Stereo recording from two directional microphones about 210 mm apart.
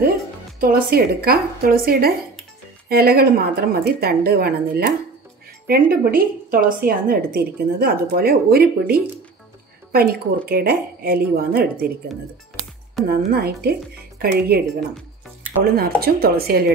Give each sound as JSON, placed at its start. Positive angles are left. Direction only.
{"t": 0.6, "sound": "a woman's voice", "side_deg": -45}
{"t": 13.1, "sound": "a woman's voice", "side_deg": -50}
{"t": 15.6, "sound": "a woman's voice", "side_deg": -45}